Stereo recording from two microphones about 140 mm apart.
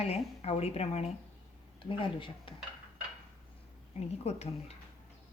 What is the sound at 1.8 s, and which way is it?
Speech, 40° left (ahead or behind).